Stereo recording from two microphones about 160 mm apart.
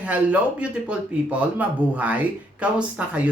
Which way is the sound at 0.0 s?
10° right (ahead or behind).